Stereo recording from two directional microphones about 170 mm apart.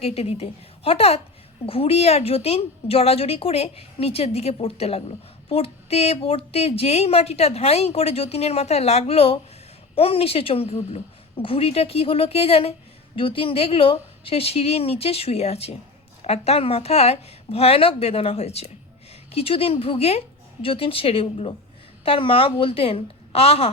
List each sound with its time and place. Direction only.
0.0 s speech: 35° left (ahead or behind)